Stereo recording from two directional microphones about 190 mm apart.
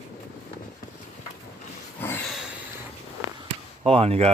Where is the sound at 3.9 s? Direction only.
30° right (ahead or behind).